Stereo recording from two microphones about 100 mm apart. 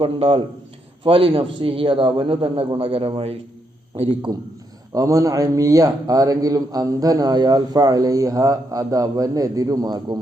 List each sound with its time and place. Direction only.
0.0 s a man's voice: 70° right (ahead or behind)
3.9 s a man's voice: 80° right
4.9 s a man's voice: 35° right (ahead or behind)